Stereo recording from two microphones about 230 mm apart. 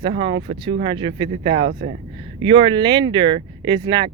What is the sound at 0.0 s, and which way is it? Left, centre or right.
Speech, right.